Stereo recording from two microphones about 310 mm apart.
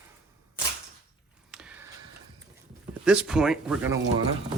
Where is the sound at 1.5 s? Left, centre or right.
Centre.